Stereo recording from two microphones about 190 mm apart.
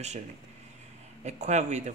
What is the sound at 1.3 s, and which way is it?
Speech, 35° right (ahead or behind).